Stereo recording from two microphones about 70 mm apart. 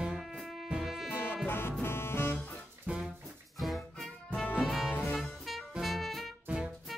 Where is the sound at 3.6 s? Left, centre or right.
Centre.